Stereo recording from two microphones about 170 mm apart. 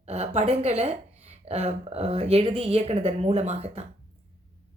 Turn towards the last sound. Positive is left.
turn(degrees=-40)  # may be behind; listen again after turning